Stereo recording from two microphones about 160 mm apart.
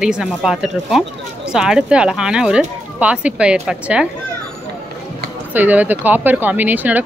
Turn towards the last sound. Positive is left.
turn(degrees=-10)  # may be behind; listen again after turning